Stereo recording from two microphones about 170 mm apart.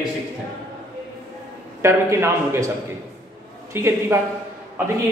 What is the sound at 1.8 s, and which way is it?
Speech, 15° right (ahead or behind).